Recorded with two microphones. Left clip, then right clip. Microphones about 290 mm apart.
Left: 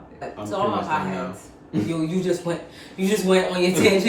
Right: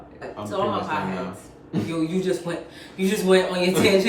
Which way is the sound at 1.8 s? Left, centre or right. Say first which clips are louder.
Even; centre.